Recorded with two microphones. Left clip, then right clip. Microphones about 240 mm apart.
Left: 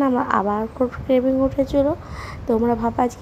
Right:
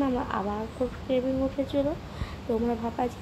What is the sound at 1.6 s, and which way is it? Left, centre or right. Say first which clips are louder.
A woman's voice: left 9 dB; left.